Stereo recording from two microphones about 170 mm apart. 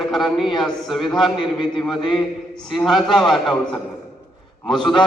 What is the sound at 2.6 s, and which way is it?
Speech, centre (ahead or behind).